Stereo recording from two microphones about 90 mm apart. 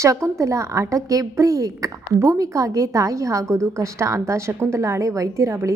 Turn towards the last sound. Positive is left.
turn(degrees=-30)  # may be behind; listen again after turning